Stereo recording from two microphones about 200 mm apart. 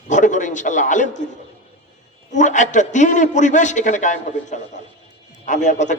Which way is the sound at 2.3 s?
35° left (ahead or behind).